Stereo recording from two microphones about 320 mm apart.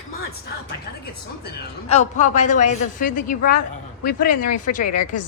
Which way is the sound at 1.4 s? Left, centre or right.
Left.